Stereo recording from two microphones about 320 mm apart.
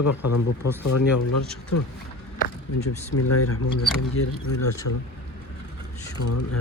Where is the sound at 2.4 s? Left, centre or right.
Left.